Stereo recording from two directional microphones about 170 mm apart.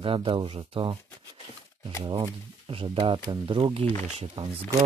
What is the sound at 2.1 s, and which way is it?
Speech, 30° right (ahead or behind).